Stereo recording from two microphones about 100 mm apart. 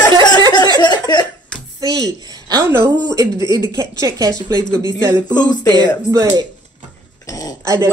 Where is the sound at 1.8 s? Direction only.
40° right (ahead or behind).